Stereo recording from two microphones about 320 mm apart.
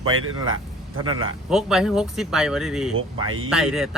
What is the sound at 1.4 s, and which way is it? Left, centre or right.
Speech, centre.